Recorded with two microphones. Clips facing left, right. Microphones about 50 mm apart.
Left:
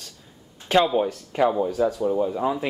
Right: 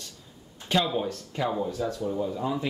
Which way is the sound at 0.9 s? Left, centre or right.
Left.